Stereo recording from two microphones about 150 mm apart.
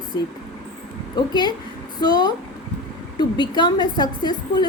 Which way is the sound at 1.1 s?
30° left (ahead or behind).